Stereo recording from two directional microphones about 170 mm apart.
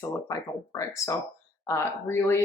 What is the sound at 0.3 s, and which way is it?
Speech, 20° left (ahead or behind).